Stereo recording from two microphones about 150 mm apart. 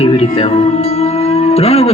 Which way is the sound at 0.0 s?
40° left (ahead or behind).